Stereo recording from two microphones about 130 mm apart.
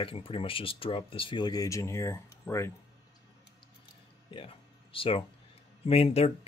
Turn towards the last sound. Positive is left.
turn(degrees=50)  # may be behind; listen again after turning